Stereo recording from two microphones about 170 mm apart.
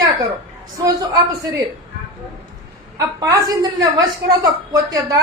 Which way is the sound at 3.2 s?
20° right (ahead or behind).